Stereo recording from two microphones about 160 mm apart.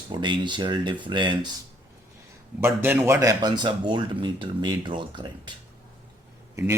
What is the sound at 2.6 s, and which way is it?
Speech, 15° right (ahead or behind).